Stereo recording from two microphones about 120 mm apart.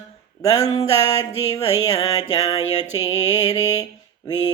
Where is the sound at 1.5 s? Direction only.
30° left (ahead or behind).